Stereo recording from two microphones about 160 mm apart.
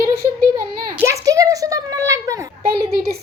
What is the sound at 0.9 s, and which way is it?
Speech, 20° right (ahead or behind).